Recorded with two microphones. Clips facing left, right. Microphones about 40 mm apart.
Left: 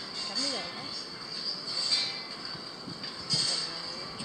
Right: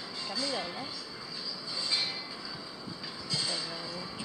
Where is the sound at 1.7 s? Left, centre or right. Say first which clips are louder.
Even; right.